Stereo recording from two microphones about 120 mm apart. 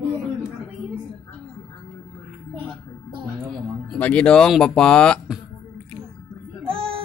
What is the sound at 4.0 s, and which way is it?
Speech, 10° left (ahead or behind).